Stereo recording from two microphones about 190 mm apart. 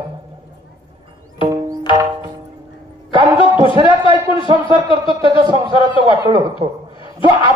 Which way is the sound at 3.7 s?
25° right (ahead or behind).